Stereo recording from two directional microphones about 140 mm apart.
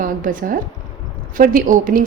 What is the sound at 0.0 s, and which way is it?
A woman's voice, 75° right (ahead or behind).